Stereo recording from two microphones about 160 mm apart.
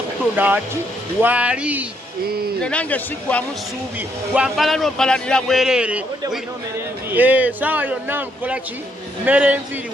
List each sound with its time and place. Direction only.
0.3 s a man's voice: 10° right (ahead or behind)
2.6 s a man's voice: 5° left (ahead or behind)
7.1 s a man's voice: 10° right (ahead or behind)